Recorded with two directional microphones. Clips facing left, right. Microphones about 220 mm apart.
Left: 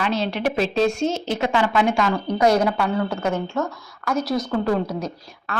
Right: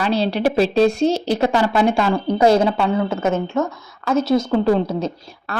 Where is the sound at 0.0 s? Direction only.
35° right (ahead or behind).